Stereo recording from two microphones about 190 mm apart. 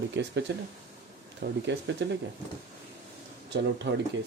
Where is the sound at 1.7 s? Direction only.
70° right (ahead or behind).